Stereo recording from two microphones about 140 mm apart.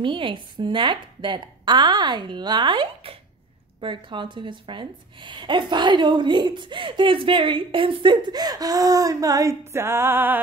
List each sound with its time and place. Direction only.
0.0 s a woman's voice: 35° right (ahead or behind); by 10.4 s 15° right (ahead or behind)